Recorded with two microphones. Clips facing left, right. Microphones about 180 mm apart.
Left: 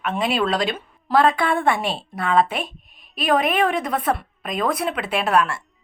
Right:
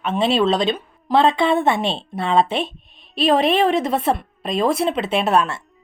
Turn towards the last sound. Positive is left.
turn(degrees=-25)  # may be behind; listen again after turning